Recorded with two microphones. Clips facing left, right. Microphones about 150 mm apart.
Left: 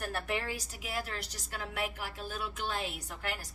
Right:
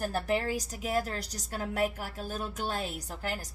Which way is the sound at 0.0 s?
35° right (ahead or behind).